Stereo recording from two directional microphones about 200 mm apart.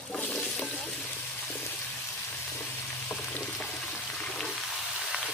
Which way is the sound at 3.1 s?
5° left (ahead or behind).